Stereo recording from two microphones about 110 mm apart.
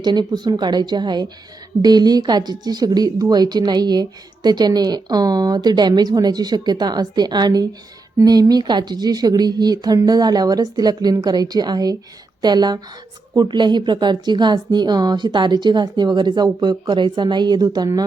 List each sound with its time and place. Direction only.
0.0 s speech: 40° right (ahead or behind)